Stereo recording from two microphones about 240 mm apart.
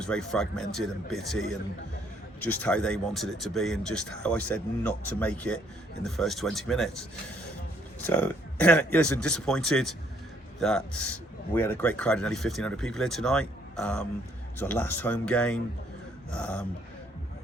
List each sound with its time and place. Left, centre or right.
0.0 s speech: centre
8.0 s speech: centre